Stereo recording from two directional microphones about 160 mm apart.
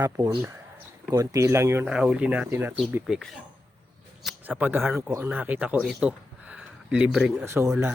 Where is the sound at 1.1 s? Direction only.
20° right (ahead or behind).